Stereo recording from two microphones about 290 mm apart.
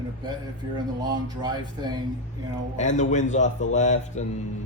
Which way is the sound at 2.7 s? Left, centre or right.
Left.